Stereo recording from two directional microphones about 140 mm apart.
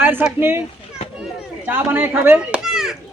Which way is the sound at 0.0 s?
15° right (ahead or behind).